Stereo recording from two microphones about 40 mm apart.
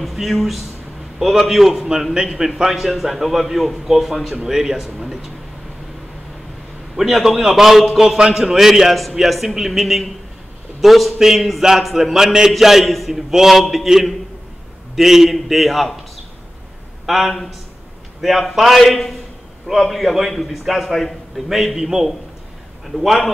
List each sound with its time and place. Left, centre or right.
0.0 s a man's voice: centre
4.4 s a man's voice: centre
7.0 s a man's voice: centre
17.0 s speech: centre
18.5 s a man's voice: centre